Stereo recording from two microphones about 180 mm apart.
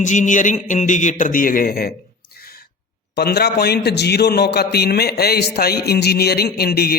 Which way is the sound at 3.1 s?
65° left (ahead or behind).